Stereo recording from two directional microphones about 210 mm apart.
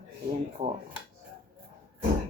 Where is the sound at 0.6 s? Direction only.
20° right (ahead or behind).